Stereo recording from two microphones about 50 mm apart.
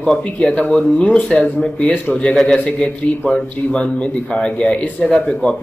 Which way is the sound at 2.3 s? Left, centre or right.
Centre.